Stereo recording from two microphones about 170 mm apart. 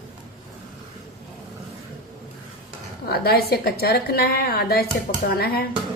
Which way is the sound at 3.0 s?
65° left (ahead or behind).